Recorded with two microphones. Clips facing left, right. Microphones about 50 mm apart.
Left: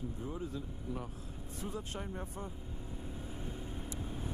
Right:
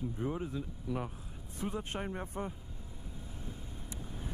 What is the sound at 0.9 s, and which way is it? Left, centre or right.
Speech, right.